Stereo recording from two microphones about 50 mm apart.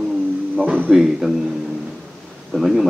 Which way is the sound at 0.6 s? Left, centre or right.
Right.